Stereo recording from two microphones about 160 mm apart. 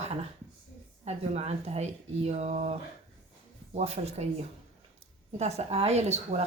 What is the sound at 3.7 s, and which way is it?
Speech, 40° right (ahead or behind).